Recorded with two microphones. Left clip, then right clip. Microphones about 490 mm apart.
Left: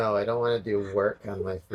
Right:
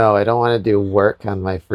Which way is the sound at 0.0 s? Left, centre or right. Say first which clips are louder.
Right 11 dB; right.